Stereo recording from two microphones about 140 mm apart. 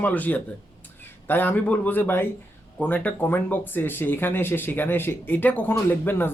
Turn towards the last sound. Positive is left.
turn(degrees=15)  # may be behind; listen again after turning